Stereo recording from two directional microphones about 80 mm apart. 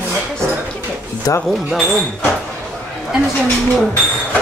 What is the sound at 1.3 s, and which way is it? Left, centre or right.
Speech, left.